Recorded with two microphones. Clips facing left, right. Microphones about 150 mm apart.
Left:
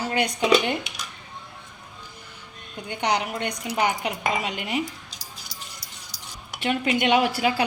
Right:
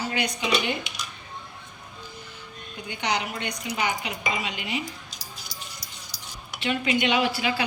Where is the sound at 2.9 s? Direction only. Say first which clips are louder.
Left 3 dB; 50° left (ahead or behind).